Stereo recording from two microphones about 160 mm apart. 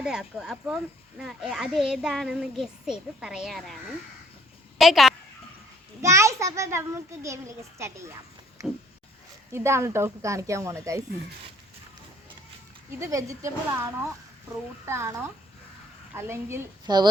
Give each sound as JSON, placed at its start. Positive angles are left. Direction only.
{"t": 0.0, "sound": "a child's voice", "side_deg": -5}
{"t": 6.0, "sound": "a child's voice", "side_deg": -20}
{"t": 9.5, "sound": "a child's voice", "side_deg": -15}
{"t": 13.0, "sound": "a child's voice", "side_deg": -20}
{"t": 16.8, "sound": "a woman's voice", "side_deg": -25}